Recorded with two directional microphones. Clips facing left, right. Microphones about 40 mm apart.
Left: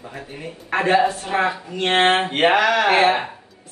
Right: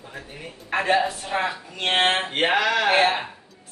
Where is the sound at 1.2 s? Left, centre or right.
Left.